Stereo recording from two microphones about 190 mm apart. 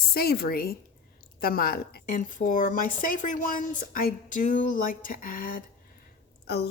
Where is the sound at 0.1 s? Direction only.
55° left (ahead or behind).